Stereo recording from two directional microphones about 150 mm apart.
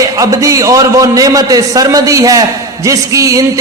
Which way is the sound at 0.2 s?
20° right (ahead or behind).